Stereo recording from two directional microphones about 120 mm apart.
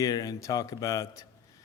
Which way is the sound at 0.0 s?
30° left (ahead or behind).